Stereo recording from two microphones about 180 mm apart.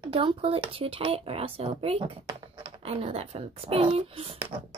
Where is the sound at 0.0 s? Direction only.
30° right (ahead or behind).